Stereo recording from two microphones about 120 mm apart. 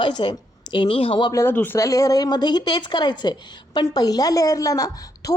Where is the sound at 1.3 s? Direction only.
25° left (ahead or behind).